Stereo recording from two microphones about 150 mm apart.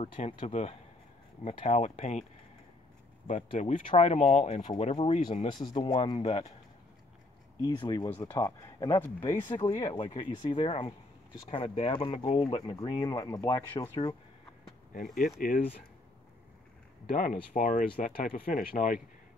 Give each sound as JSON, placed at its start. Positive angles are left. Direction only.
{"t": 0.0, "sound": "speech", "side_deg": 40}
{"t": 0.5, "sound": "speech", "side_deg": 45}
{"t": 3.5, "sound": "speech", "side_deg": 55}
{"t": 5.4, "sound": "speech", "side_deg": 30}
{"t": 7.8, "sound": "speech", "side_deg": 25}
{"t": 8.1, "sound": "speech", "side_deg": 15}
{"t": 8.4, "sound": "speech", "side_deg": 25}
{"t": 9.0, "sound": "speech", "side_deg": 15}
{"t": 15.4, "sound": "speech", "side_deg": 65}
{"t": 17.0, "sound": "speech", "side_deg": 70}